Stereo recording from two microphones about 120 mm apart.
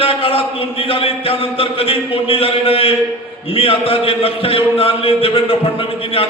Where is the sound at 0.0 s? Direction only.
50° left (ahead or behind).